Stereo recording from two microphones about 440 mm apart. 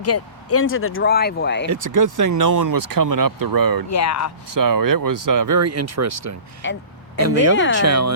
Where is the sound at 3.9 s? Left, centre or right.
Left.